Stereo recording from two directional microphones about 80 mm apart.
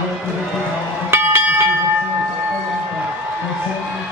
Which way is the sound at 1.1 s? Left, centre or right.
Right.